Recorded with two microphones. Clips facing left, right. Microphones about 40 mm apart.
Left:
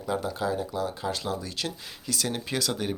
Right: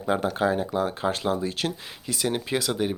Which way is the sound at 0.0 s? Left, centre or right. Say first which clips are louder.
Right 5 dB; right.